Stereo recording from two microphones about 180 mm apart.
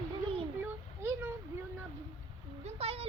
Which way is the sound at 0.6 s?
10° right (ahead or behind).